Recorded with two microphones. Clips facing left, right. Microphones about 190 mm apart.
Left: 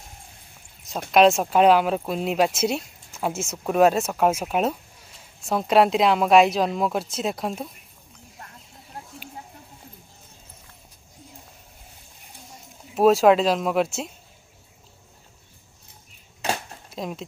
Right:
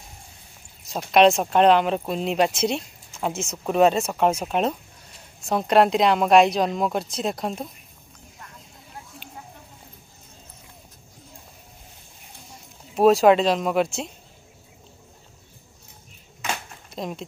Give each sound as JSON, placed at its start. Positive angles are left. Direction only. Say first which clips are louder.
{"t": 1.1, "sound": "speech", "louder": "even", "side_deg": 0}
{"t": 12.9, "sound": "speech", "louder": "right 1 dB", "side_deg": 0}
{"t": 16.9, "sound": "speech", "louder": "even", "side_deg": 0}